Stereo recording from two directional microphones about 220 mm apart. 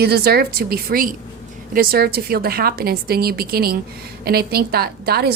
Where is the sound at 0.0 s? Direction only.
45° right (ahead or behind).